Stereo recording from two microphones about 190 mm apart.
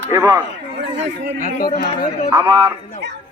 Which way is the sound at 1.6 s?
45° left (ahead or behind).